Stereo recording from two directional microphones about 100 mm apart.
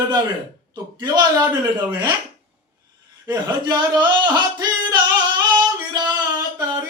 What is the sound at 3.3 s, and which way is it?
A man's voice, 45° right (ahead or behind).